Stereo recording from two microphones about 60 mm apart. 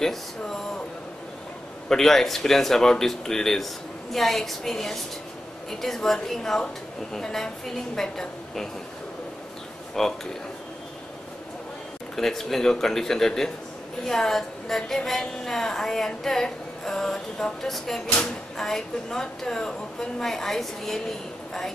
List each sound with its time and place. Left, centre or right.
0.0 s a woman's voice: centre
1.9 s a woman's voice: centre
10.0 s a woman's voice: centre
12.2 s a woman's voice: centre
18.0 s a woman's voice: centre